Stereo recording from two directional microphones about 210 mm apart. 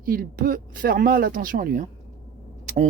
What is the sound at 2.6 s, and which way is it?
Vehicle, 35° right (ahead or behind).